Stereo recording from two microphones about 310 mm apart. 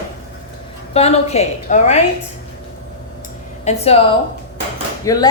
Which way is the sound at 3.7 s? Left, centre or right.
Centre.